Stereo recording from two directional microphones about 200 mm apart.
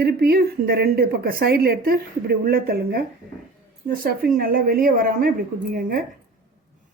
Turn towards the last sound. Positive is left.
turn(degrees=-45)  # may be behind; listen again after turning